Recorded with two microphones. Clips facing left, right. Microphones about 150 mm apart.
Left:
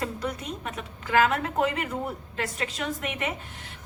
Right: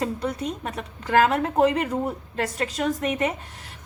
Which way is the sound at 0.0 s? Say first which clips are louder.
Right 5 dB; 30° right (ahead or behind).